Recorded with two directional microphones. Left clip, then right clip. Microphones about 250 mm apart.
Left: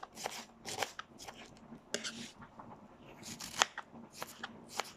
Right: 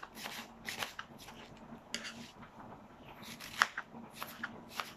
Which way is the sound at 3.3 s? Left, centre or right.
Left.